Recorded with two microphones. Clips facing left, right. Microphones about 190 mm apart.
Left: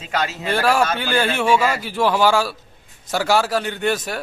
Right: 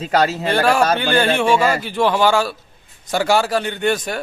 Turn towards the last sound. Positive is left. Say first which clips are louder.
# right 2 dB
turn(degrees=5)  # may be behind; listen again after turning